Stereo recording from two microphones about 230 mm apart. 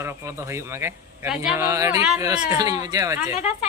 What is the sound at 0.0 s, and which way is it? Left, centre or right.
A man's voice, centre.